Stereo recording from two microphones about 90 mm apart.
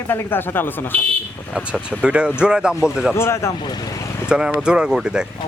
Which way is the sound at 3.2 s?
30° left (ahead or behind).